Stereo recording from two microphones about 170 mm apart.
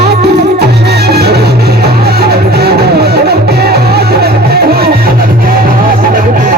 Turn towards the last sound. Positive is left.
turn(degrees=-55)  # may be behind; listen again after turning